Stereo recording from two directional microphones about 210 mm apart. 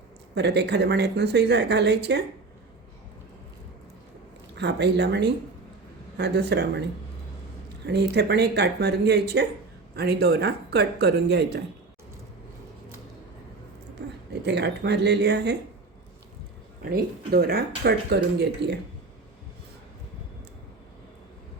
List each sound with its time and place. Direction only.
0.3 s speech: 55° right (ahead or behind)
4.5 s speech: 55° right (ahead or behind)
7.9 s speech: 50° right (ahead or behind)
14.4 s speech: 55° right (ahead or behind)
16.8 s speech: 45° right (ahead or behind)